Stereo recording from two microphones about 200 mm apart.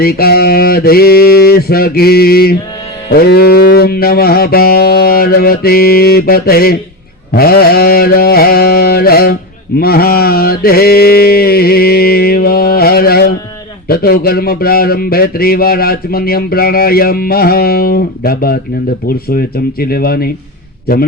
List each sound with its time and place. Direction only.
0.0 s speech: 50° left (ahead or behind)
9.7 s mantra: 50° left (ahead or behind)
13.8 s speech: 50° left (ahead or behind)
19.8 s speech: 50° left (ahead or behind)